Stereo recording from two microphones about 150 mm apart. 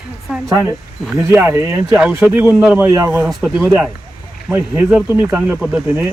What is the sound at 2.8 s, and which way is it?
Speech, 20° right (ahead or behind).